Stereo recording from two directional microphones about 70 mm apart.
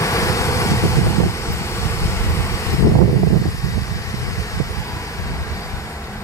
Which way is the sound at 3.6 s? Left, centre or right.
Left.